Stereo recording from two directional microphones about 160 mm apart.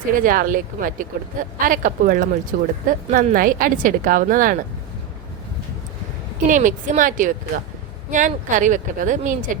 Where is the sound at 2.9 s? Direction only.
55° right (ahead or behind).